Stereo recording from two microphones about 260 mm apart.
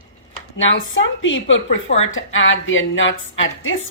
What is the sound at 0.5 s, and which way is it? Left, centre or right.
Speech, left.